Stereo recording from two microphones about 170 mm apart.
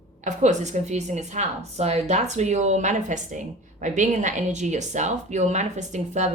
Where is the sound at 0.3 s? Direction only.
45° right (ahead or behind).